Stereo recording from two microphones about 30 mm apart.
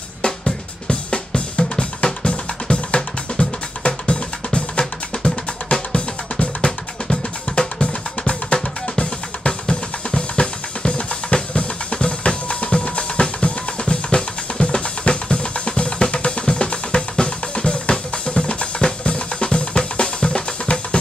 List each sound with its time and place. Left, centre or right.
0.8 s drum kit: left
6.6 s drum: left
9.5 s drum: left
13.2 s drum kit: left
19.0 s drum: left